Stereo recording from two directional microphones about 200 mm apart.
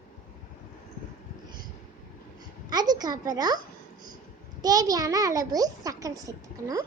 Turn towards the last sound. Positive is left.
turn(degrees=-15)  # may be behind; listen again after turning